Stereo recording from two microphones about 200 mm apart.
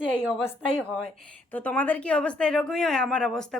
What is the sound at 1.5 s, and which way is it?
A woman's voice, 10° left (ahead or behind).